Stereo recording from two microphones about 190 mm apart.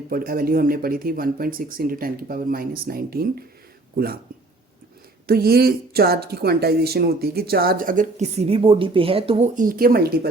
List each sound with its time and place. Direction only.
0.1 s speech: 50° right (ahead or behind)
5.2 s speech: 55° right (ahead or behind); by 9.5 s 30° right (ahead or behind)
9.6 s speech: 50° right (ahead or behind)